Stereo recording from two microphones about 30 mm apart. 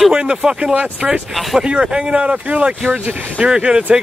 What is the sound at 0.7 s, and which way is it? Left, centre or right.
Speech, right.